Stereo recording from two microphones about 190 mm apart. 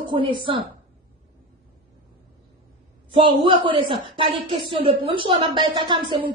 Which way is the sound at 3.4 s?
25° right (ahead or behind).